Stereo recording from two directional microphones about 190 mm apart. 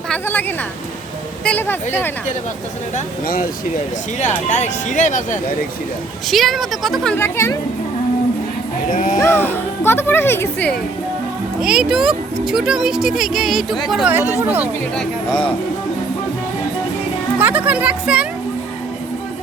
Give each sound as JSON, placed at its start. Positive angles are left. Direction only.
{"t": 0.1, "sound": "speech", "side_deg": 10}
{"t": 2.9, "sound": "speech", "side_deg": 50}
{"t": 4.2, "sound": "speech", "side_deg": 40}
{"t": 6.2, "sound": "speech", "side_deg": 0}
{"t": 8.9, "sound": "speech", "side_deg": 45}
{"t": 9.2, "sound": "speech", "side_deg": 10}
{"t": 11.6, "sound": "speech", "side_deg": -5}
{"t": 17.3, "sound": "speech", "side_deg": -10}